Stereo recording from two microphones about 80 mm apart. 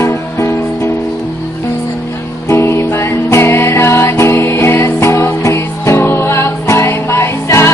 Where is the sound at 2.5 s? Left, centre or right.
Left.